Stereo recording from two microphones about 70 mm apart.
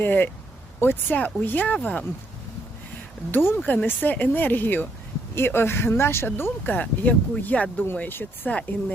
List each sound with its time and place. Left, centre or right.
0.0 s speech: left
3.3 s speech: left